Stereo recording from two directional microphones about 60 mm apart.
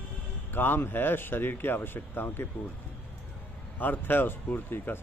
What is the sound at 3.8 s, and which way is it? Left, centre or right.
Speech, left.